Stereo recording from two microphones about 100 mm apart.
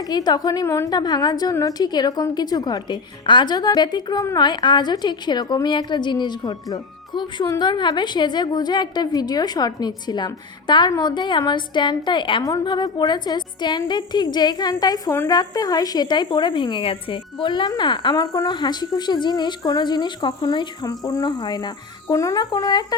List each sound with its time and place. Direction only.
0.0 s a woman's voice: 40° left (ahead or behind)
0.9 s a woman's voice: 45° left (ahead or behind)
12.4 s a woman's voice: 35° left (ahead or behind); by 17.2 s 60° left (ahead or behind)
17.4 s a woman's voice: 50° left (ahead or behind)